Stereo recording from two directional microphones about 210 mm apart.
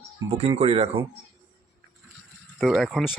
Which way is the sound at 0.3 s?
30° right (ahead or behind).